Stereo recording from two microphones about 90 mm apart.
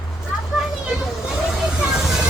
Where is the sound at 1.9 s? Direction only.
5° right (ahead or behind).